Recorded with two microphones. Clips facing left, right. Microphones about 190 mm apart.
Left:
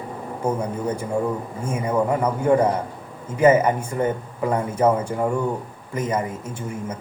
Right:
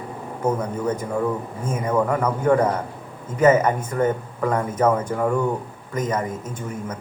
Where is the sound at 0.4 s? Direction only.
10° left (ahead or behind).